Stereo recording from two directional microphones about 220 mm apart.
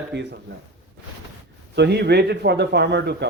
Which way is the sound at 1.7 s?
50° right (ahead or behind).